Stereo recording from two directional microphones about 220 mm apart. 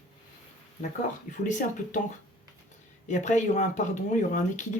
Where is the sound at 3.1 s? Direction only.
35° left (ahead or behind).